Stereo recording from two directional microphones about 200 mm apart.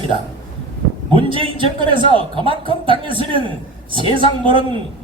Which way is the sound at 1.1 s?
25° right (ahead or behind).